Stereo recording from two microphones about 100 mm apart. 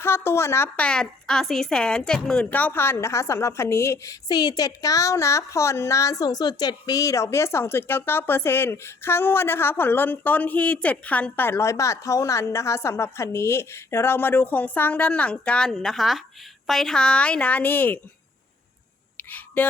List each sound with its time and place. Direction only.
0.0 s speech: 25° left (ahead or behind)
0.8 s a woman's voice: 10° left (ahead or behind)
19.1 s a sound: 15° left (ahead or behind)